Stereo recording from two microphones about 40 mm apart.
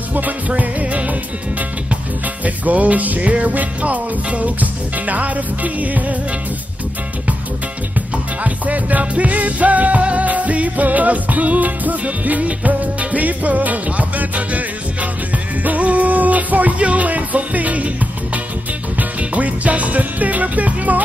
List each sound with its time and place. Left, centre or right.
0.1 s music: right
2.4 s music: right
8.5 s music: right